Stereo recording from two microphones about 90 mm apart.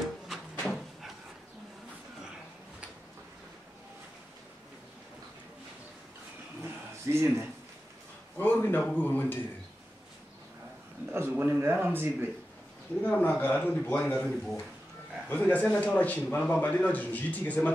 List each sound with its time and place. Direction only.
0.3 s a sound: 5° right (ahead or behind)
6.6 s a sound: 30° right (ahead or behind)
8.4 s a man's voice: 20° left (ahead or behind)
11.1 s speech: 25° right (ahead or behind)
13.0 s a man's voice: 20° left (ahead or behind)
14.2 s speech: centre (ahead or behind)
15.2 s a man's voice: 20° left (ahead or behind)